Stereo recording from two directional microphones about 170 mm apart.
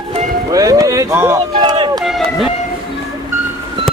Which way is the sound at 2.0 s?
Centre (ahead or behind).